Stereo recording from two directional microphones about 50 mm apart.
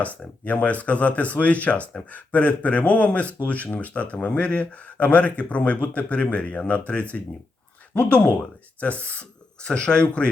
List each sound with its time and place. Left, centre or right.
0.0 s speech: left
9.6 s speech: centre